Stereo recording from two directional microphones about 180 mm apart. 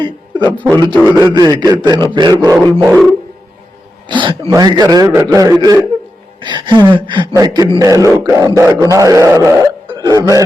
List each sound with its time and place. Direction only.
0.0 s a man's voice: 25° right (ahead or behind)
4.0 s a man's voice: 25° right (ahead or behind)
8.0 s a sound: 20° right (ahead or behind)